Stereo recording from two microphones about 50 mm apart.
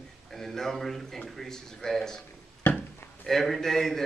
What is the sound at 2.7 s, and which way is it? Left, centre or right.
Speech, left.